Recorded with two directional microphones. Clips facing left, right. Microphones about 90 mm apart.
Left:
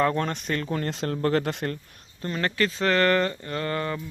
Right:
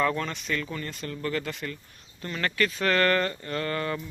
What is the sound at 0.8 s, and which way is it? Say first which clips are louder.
Speech: left 7 dB; 75° left (ahead or behind).